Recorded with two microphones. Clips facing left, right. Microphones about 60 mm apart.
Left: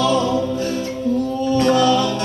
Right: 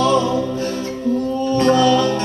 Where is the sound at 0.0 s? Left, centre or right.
Right.